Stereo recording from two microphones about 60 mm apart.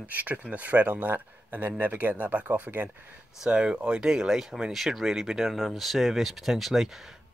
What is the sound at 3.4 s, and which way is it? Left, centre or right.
Speech, centre.